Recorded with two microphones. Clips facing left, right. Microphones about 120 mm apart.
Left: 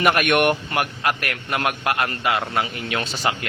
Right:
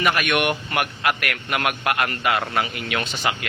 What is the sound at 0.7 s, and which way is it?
A man's voice, 30° left (ahead or behind).